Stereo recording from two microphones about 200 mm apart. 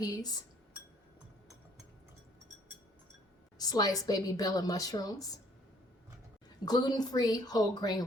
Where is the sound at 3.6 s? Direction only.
20° left (ahead or behind).